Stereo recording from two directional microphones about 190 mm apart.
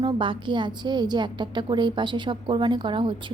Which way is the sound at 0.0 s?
25° right (ahead or behind).